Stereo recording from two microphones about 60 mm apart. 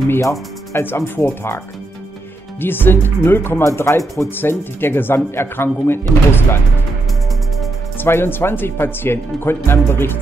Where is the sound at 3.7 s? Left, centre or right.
Left.